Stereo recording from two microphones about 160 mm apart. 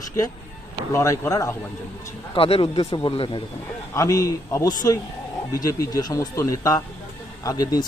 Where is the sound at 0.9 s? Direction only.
20° left (ahead or behind).